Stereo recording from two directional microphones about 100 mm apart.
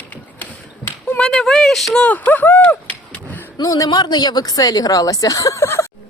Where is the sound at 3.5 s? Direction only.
35° left (ahead or behind).